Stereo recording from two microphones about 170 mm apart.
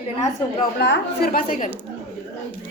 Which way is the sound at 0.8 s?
70° left (ahead or behind).